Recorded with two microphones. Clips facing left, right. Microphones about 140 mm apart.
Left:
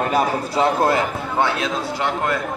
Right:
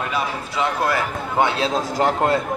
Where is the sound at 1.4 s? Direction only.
25° right (ahead or behind).